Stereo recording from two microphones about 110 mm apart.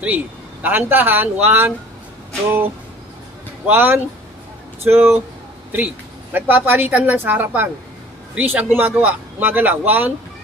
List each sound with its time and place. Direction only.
0.0 s a man's voice: 15° right (ahead or behind)
3.6 s a man's voice: 15° right (ahead or behind)
6.3 s a man's voice: 15° right (ahead or behind)